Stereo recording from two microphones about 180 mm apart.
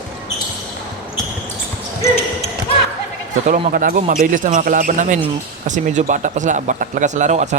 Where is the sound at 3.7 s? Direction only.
50° right (ahead or behind).